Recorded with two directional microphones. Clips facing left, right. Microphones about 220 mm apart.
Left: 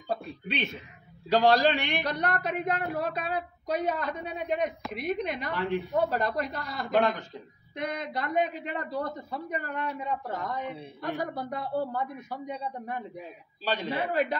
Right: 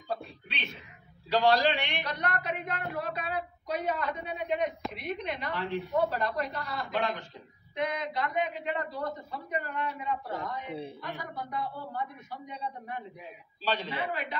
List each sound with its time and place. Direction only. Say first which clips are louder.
0.1 s a man's voice: left 5 dB; 45° left (ahead or behind)